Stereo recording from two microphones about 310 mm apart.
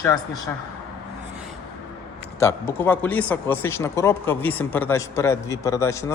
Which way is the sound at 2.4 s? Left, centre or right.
Centre.